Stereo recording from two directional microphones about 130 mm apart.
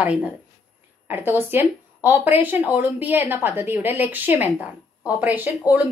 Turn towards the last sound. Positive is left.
turn(degrees=-10)  # may be behind; listen again after turning